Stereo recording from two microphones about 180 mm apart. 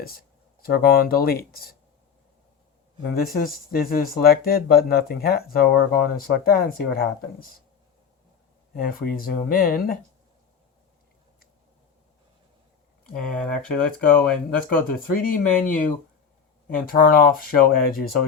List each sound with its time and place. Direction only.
0.0 s speech: 55° left (ahead or behind)
3.0 s speech: 55° left (ahead or behind)
8.7 s speech: 55° left (ahead or behind)
13.3 s speech: 5° left (ahead or behind)
14.7 s speech: 50° left (ahead or behind)
16.6 s speech: 50° left (ahead or behind)